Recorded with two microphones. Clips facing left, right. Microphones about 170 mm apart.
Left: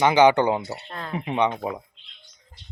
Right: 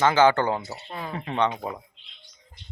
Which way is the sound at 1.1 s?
15° left (ahead or behind).